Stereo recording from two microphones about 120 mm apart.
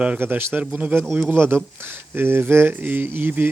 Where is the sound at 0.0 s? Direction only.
15° right (ahead or behind).